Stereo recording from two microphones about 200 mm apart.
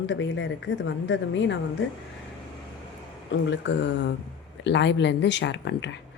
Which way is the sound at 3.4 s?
65° left (ahead or behind).